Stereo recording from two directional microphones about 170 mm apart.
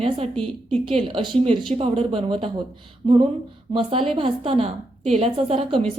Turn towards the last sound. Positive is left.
turn(degrees=-35)  # may be behind; listen again after turning